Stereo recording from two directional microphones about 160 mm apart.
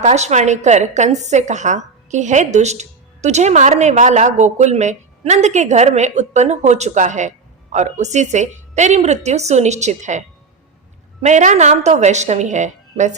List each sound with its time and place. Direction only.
0.0 s a woman's voice: 45° right (ahead or behind)